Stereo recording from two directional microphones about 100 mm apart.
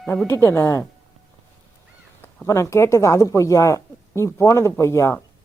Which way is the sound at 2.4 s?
30° left (ahead or behind).